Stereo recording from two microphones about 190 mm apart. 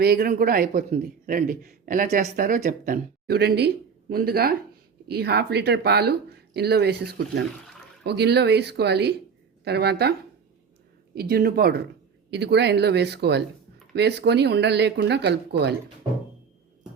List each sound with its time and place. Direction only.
0.0 s speech: 50° right (ahead or behind)